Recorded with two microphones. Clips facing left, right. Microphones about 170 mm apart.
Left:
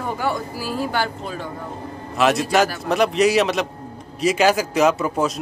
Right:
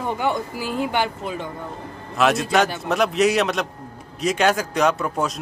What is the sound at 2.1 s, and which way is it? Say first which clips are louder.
Speech: left 1 dB; centre (ahead or behind).